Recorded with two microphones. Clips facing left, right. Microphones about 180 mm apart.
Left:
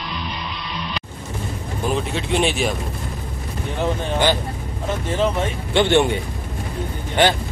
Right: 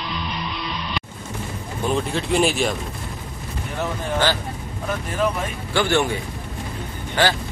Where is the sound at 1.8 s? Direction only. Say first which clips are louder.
Right 1 dB; centre (ahead or behind).